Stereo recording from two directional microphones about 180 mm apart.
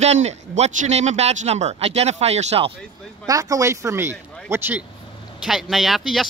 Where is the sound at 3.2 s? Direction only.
20° right (ahead or behind).